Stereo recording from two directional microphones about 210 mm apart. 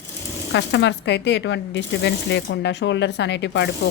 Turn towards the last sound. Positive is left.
turn(degrees=60)  # may be behind; listen again after turning